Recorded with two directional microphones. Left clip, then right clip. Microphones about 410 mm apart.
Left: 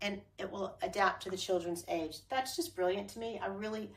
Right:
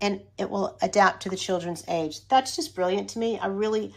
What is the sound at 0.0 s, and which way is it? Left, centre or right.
Speech, centre.